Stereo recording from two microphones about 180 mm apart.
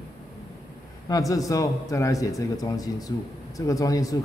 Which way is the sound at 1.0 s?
20° left (ahead or behind).